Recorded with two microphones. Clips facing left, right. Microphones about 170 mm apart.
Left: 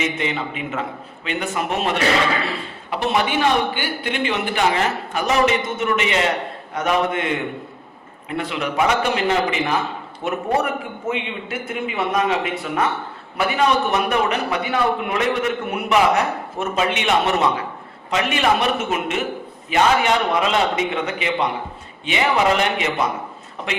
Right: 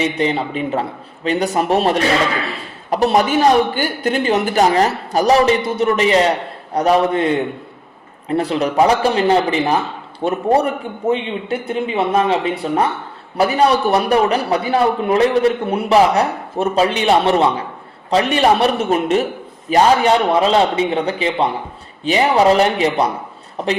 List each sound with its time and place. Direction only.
0.0 s a man's voice: 35° right (ahead or behind)